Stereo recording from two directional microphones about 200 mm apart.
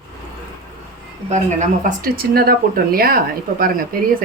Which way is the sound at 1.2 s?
40° right (ahead or behind).